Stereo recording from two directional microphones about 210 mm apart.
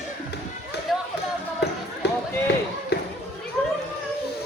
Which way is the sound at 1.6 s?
50° left (ahead or behind).